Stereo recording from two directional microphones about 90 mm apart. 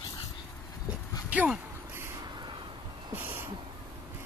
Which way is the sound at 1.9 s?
30° right (ahead or behind).